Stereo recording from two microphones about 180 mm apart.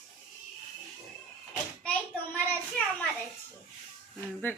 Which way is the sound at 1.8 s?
5° left (ahead or behind).